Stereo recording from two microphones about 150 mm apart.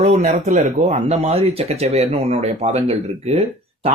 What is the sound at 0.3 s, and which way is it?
Speech, 55° right (ahead or behind).